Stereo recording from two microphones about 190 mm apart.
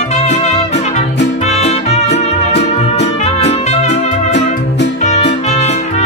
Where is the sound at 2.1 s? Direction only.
65° left (ahead or behind).